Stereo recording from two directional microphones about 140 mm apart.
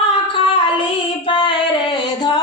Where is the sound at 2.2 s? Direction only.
30° left (ahead or behind).